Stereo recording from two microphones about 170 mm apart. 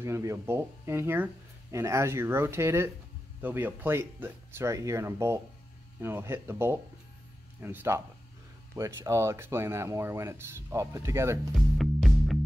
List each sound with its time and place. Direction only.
0.0 s speech: 15° right (ahead or behind)
11.5 s music: centre (ahead or behind)